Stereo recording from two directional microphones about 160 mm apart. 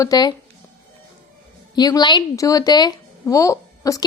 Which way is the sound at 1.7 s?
25° left (ahead or behind).